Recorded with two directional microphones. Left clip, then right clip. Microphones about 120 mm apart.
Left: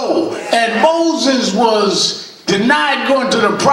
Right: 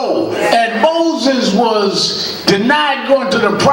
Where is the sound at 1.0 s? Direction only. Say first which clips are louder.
Right 1 dB; 45° left (ahead or behind).